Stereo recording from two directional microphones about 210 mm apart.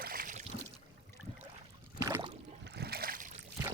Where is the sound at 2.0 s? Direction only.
20° right (ahead or behind).